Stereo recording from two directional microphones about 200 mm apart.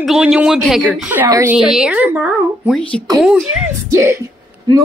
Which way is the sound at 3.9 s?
15° right (ahead or behind).